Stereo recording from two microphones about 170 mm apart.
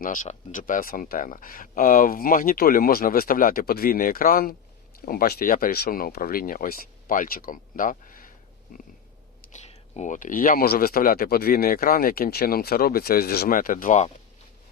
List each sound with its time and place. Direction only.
0.0 s speech: 50° left (ahead or behind)
9.5 s speech: 40° left (ahead or behind)